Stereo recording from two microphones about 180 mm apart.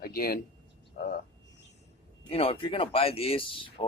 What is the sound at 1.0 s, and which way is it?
Frog, 50° left (ahead or behind).